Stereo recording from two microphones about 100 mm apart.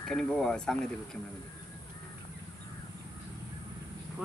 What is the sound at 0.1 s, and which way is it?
Speech, 5° left (ahead or behind).